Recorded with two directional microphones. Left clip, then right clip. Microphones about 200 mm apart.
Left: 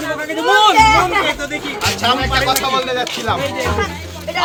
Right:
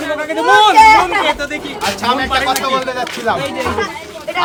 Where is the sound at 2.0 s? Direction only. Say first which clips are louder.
Right 1 dB; 65° right (ahead or behind).